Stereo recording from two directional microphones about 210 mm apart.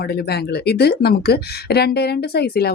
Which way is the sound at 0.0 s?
50° left (ahead or behind).